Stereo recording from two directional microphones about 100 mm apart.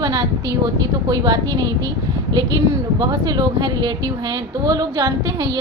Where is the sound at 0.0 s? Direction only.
40° right (ahead or behind).